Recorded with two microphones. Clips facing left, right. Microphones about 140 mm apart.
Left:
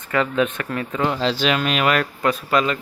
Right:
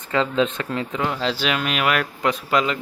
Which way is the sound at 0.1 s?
25° right (ahead or behind).